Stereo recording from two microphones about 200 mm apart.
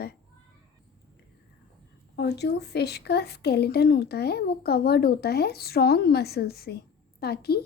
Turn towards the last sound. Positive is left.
turn(degrees=50)  # may be behind; listen again after turning